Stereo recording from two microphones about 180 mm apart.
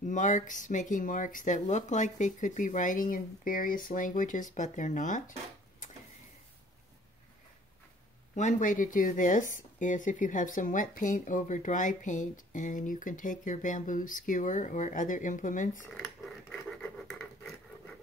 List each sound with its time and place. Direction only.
0.0 s speech: 45° left (ahead or behind)
8.4 s speech: 45° left (ahead or behind)
15.9 s scratch: 10° left (ahead or behind)